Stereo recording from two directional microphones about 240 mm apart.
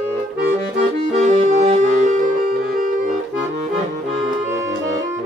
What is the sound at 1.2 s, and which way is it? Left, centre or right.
Music, right.